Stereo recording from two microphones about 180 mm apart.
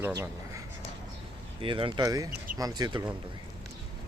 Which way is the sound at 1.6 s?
30° right (ahead or behind).